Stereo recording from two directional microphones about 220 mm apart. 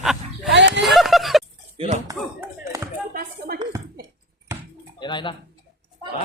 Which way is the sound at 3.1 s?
40° right (ahead or behind).